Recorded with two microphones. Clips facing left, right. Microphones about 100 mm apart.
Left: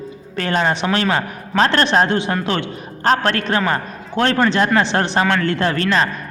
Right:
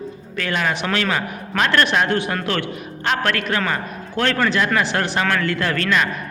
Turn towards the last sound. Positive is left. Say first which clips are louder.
# left 3 dB
turn(degrees=30)  # may be behind; listen again after turning